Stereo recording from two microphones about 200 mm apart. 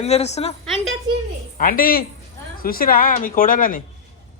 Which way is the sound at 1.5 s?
45° left (ahead or behind).